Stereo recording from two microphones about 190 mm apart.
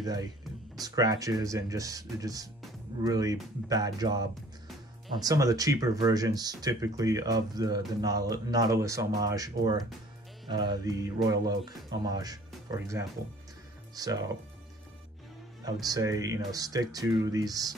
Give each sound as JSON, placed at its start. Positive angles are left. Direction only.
{"t": 0.0, "sound": "speech", "side_deg": -20}
{"t": 15.6, "sound": "speech", "side_deg": -20}